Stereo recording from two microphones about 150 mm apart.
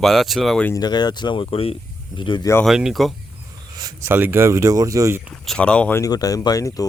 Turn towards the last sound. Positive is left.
turn(degrees=25)  # may be behind; listen again after turning